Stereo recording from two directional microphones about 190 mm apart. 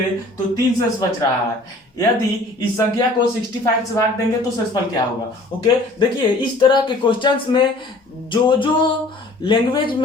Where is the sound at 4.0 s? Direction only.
15° left (ahead or behind).